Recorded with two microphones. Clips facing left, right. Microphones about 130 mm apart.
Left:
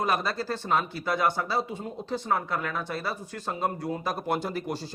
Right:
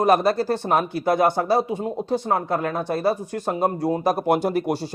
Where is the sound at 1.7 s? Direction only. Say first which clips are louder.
Right 9 dB; 55° right (ahead or behind); by 4.3 s 40° right (ahead or behind).